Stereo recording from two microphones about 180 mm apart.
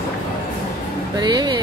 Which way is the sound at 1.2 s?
25° right (ahead or behind).